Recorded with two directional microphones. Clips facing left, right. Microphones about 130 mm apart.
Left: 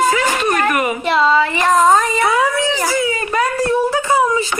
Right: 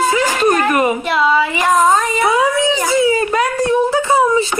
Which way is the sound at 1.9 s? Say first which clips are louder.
Left 1 dB; centre (ahead or behind).